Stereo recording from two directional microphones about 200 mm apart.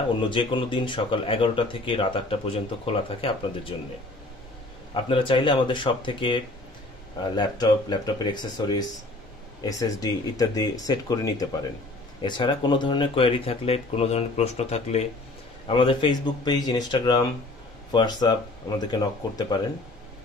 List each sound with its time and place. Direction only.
0.3 s speech: 25° left (ahead or behind)
4.9 s speech: 25° left (ahead or behind)